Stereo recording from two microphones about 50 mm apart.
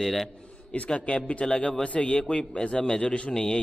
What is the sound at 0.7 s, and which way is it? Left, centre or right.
A man's voice, left.